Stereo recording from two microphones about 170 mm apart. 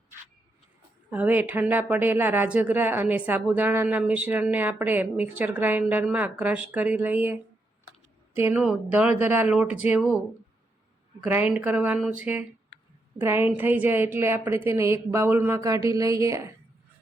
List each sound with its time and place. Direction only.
1.1 s a woman's voice: 10° right (ahead or behind)
8.4 s a woman's voice: 15° right (ahead or behind)
11.2 s a woman's voice: 10° right (ahead or behind)